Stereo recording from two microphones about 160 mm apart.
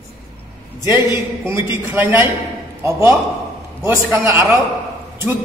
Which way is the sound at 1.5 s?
15° right (ahead or behind).